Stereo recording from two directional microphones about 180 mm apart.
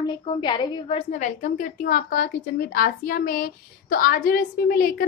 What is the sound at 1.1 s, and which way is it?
A woman's voice, 45° left (ahead or behind).